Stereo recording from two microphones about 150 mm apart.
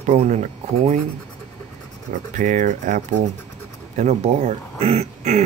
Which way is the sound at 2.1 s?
60° right (ahead or behind).